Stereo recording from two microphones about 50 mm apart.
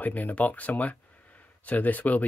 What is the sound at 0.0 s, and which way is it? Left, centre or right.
Speech, left.